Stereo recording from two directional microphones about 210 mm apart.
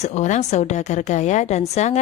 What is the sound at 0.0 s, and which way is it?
A woman's voice, 35° left (ahead or behind).